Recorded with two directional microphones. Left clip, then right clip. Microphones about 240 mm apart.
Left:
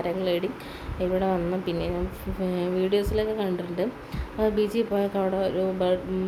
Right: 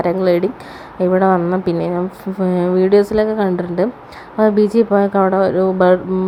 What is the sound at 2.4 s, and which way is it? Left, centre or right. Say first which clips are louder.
Speech: right 11 dB; right.